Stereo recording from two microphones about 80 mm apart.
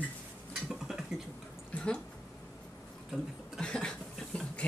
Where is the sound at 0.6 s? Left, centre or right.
Centre.